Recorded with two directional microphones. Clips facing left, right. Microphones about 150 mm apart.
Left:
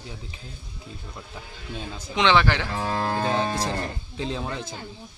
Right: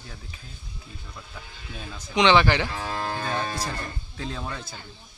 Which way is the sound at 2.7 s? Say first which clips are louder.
Left 4 dB; 40° left (ahead or behind).